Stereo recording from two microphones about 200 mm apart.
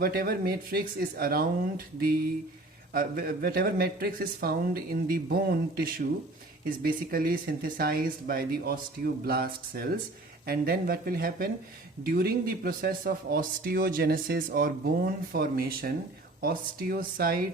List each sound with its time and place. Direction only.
0.0 s speech: 50° right (ahead or behind)
2.9 s speech: 45° right (ahead or behind)